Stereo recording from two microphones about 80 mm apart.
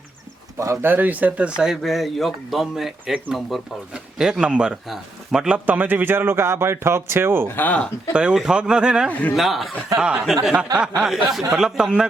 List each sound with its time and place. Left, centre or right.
0.6 s speech: right
0.9 s speech: right; by 5.5 s centre
5.6 s a man's voice: right
7.4 s speech: left
8.1 s speech: centre